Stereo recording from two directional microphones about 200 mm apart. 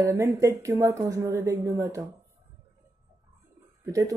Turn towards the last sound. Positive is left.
turn(degrees=-15)  # may be behind; listen again after turning